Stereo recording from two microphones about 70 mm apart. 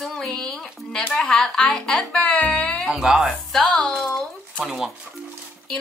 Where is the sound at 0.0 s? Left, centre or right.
Centre.